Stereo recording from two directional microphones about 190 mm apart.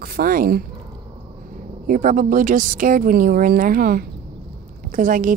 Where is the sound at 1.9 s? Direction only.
45° right (ahead or behind).